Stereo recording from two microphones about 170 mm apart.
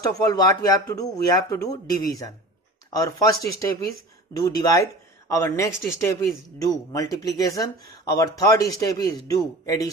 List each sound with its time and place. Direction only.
0.0 s speech: 20° left (ahead or behind)
2.9 s speech: 20° left (ahead or behind)